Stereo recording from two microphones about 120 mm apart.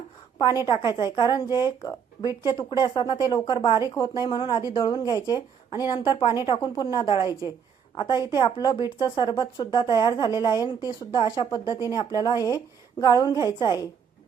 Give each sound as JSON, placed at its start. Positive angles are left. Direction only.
{"t": 0.3, "sound": "speech", "side_deg": 35}